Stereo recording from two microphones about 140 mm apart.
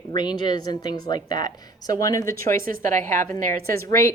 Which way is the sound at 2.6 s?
75° right (ahead or behind).